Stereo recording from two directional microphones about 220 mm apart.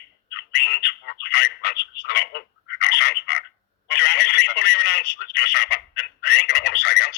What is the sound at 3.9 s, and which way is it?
Telephone, 50° left (ahead or behind).